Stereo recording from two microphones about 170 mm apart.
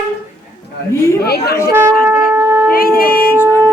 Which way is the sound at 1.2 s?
70° left (ahead or behind).